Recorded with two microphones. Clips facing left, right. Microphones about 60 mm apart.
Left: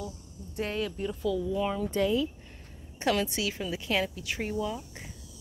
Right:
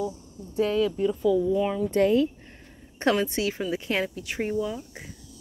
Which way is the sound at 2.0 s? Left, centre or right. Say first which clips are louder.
Right 7 dB; right.